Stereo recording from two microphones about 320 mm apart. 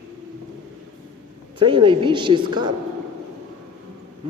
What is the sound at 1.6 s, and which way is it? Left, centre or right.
A woman's voice, centre.